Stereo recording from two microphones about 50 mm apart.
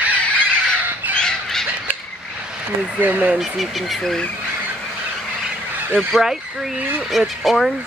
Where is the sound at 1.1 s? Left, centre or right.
Centre.